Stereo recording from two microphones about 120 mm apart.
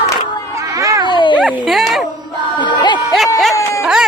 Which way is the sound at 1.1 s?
40° left (ahead or behind).